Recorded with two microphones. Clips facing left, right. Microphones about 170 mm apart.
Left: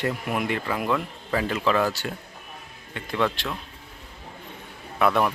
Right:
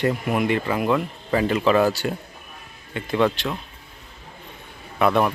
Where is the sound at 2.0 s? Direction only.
20° right (ahead or behind).